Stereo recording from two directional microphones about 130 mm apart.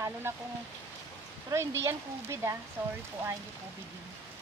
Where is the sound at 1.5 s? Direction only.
20° right (ahead or behind).